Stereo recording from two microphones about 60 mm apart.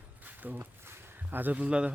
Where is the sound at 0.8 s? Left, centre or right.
Right.